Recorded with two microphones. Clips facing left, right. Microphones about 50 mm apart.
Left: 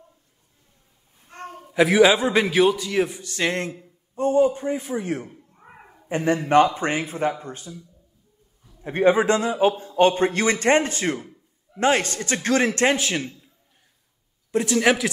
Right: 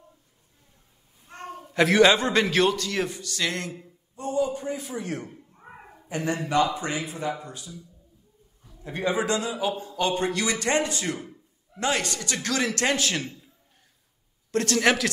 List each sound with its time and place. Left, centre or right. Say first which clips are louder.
1.5 s a man's voice: left 3 dB; centre
3.3 s a man's voice: left 4 dB; left
5.3 s cat: right 1 dB; centre
6.0 s a man's voice: left 6 dB; left
8.8 s a man's voice: left 8 dB; left; by 13.3 s centre
14.5 s a man's voice: left 3 dB; centre